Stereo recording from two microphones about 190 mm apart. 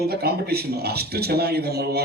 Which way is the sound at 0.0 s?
55° right (ahead or behind).